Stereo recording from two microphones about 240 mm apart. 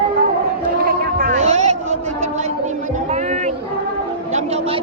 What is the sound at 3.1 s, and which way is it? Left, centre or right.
Music, right.